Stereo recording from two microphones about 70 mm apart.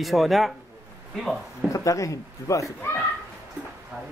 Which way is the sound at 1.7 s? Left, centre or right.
Left.